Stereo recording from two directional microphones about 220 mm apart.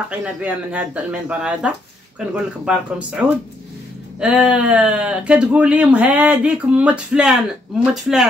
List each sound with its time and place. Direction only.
0.1 s speech: 5° right (ahead or behind)